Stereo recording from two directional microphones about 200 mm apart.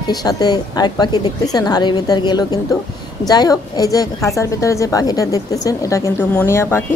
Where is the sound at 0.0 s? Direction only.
20° left (ahead or behind).